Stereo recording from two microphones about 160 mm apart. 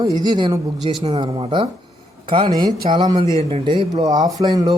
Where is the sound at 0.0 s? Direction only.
25° right (ahead or behind).